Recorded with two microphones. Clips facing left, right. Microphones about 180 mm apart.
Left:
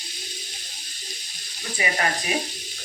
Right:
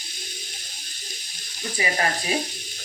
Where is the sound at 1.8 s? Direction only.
30° right (ahead or behind).